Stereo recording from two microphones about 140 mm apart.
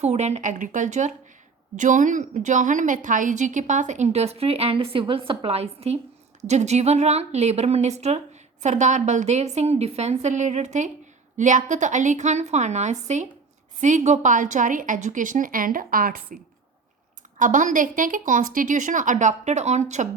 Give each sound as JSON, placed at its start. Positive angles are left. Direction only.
{"t": 0.0, "sound": "a woman's voice", "side_deg": -50}
{"t": 17.3, "sound": "a woman's voice", "side_deg": -65}